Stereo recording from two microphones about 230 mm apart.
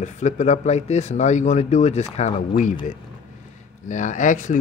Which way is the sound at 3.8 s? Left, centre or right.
Left.